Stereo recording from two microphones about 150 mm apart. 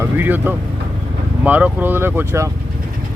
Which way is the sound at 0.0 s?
15° right (ahead or behind).